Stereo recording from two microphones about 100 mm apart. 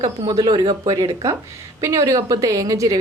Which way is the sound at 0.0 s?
45° right (ahead or behind).